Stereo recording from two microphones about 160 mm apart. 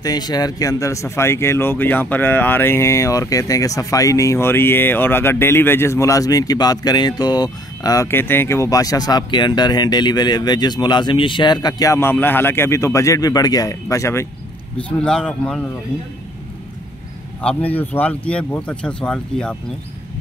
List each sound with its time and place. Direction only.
0.0 s speech: 25° left (ahead or behind)
14.8 s a man's voice: 5° left (ahead or behind)
17.4 s speech: 10° left (ahead or behind)